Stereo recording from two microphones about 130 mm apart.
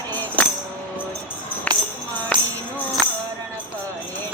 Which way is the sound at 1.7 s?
10° left (ahead or behind).